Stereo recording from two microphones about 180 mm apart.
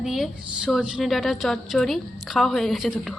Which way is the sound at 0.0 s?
5° right (ahead or behind).